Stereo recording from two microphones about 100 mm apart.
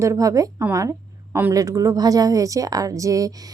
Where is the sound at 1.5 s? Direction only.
35° right (ahead or behind).